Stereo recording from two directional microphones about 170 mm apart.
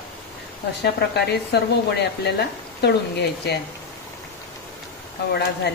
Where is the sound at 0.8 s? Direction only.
75° left (ahead or behind).